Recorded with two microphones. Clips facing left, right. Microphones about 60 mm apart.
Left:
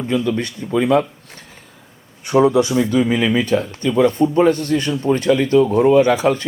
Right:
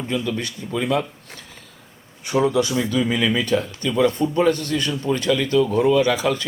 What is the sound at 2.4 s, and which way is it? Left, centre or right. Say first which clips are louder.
Speech: left 5 dB; left.